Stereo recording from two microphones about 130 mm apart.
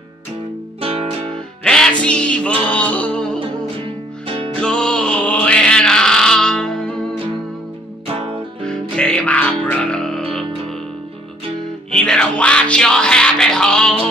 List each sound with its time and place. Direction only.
0.7 s music: 45° right (ahead or behind)
1.6 s music: 5° left (ahead or behind)
3.3 s music: 45° right (ahead or behind)
4.6 s music: 5° left (ahead or behind)
8.9 s music: 10° left (ahead or behind)
11.9 s music: 5° left (ahead or behind)